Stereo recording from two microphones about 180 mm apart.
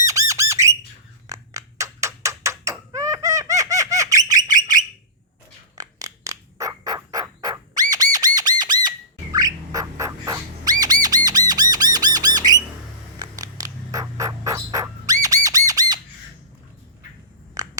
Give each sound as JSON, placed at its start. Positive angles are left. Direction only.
{"t": 0.0, "sound": "squawk", "side_deg": -20}
{"t": 1.3, "sound": "a sound", "side_deg": -15}
{"t": 2.9, "sound": "baby laughter", "side_deg": -20}
{"t": 5.7, "sound": "turkey", "side_deg": -20}
{"t": 8.4, "sound": "squawk", "side_deg": -20}
{"t": 13.1, "sound": "bird", "side_deg": -20}
{"t": 17.6, "sound": "a sound", "side_deg": -20}